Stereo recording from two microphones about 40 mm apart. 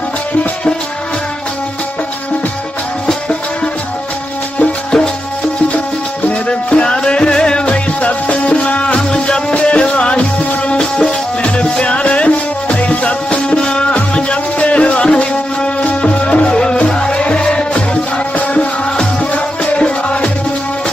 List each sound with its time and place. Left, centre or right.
3.1 s music: left
6.7 s music: left
9.0 s music: centre
10.8 s music: centre
11.4 s music: left